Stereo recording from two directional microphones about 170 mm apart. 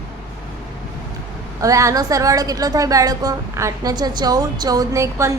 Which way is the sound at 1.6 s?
20° right (ahead or behind).